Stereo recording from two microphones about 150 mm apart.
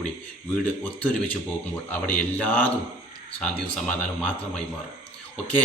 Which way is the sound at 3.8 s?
5° left (ahead or behind).